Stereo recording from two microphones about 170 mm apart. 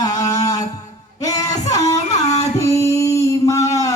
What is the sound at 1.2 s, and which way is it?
Music, 20° left (ahead or behind).